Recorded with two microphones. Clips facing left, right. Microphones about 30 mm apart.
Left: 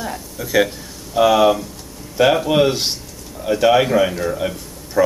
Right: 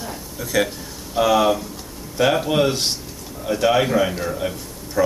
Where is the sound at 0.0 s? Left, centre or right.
Centre.